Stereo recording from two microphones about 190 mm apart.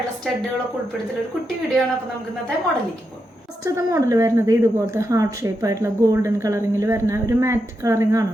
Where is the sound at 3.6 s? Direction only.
15° right (ahead or behind).